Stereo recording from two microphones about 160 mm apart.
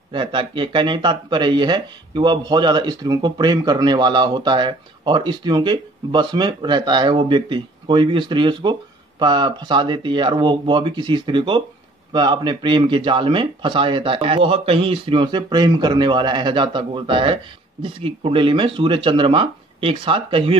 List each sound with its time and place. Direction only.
0.1 s speech: 30° right (ahead or behind)